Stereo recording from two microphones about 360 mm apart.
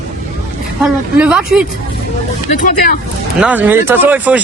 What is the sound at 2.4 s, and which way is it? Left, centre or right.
Speech, left.